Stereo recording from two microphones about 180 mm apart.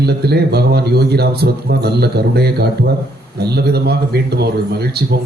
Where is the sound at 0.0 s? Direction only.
65° right (ahead or behind).